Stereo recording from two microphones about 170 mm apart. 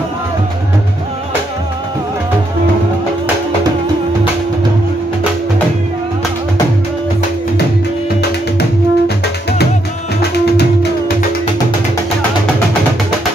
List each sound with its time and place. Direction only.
8.2 s music: 70° left (ahead or behind)